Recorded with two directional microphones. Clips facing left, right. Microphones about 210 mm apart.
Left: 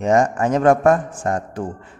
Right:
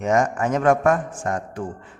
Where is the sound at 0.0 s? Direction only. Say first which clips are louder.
Left 3 dB; 30° left (ahead or behind).